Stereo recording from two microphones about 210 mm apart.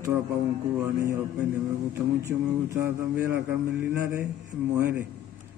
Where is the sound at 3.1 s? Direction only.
10° right (ahead or behind).